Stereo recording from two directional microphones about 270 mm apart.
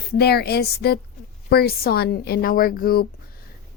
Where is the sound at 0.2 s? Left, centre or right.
Left.